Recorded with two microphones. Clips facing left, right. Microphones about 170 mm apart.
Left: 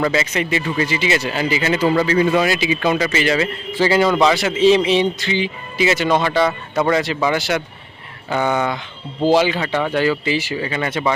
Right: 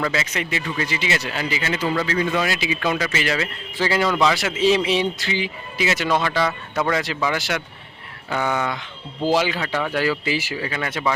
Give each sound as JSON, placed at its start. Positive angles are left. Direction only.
{"t": 0.0, "sound": "speech", "side_deg": 5}
{"t": 1.5, "sound": "speech", "side_deg": 15}
{"t": 1.8, "sound": "a man's voice", "side_deg": 40}
{"t": 2.0, "sound": "speech", "side_deg": 10}
{"t": 6.3, "sound": "a man's voice", "side_deg": 20}
{"t": 6.9, "sound": "speech", "side_deg": 0}